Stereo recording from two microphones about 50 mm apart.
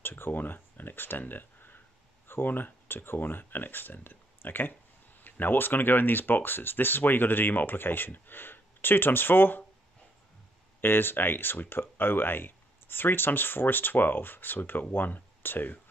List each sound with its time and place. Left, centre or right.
0.0 s speech: left
10.8 s speech: left